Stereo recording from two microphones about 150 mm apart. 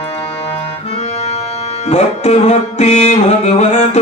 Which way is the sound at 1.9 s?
45° left (ahead or behind).